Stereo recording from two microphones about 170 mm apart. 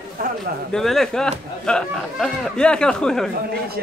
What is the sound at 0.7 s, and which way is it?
Speech, centre (ahead or behind).